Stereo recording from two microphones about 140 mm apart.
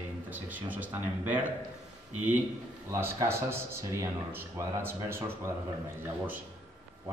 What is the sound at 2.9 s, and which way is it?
Speech, 20° right (ahead or behind).